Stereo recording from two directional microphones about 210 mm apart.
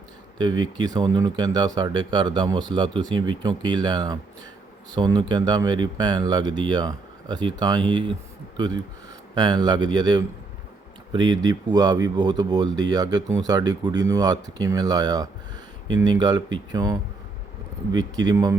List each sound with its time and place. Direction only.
0.3 s speech: 20° right (ahead or behind)